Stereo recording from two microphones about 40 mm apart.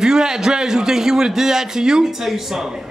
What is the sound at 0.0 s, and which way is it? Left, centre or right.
A man's voice, centre.